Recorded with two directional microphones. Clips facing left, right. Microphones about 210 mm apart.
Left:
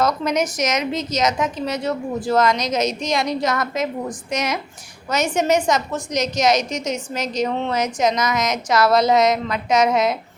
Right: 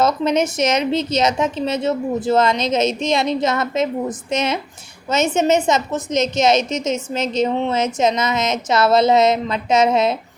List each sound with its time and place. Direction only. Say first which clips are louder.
0.0 s a woman's voice: right 3 dB; 25° right (ahead or behind)